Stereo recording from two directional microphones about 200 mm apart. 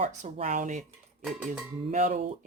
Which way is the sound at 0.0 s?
35° right (ahead or behind).